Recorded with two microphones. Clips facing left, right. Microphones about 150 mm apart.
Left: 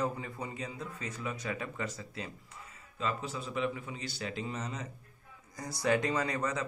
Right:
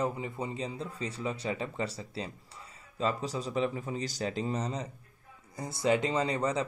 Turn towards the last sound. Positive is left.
turn(degrees=-30)  # may be behind; listen again after turning